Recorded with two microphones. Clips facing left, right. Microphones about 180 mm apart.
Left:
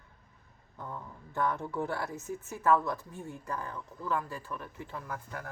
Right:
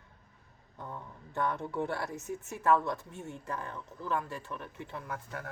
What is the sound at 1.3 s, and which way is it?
Speech, 20° right (ahead or behind).